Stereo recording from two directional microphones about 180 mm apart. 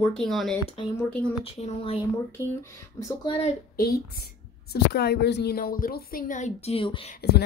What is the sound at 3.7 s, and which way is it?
A woman's voice, 60° left (ahead or behind).